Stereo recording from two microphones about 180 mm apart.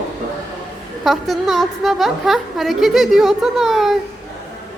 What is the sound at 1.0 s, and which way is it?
A woman's voice, centre (ahead or behind).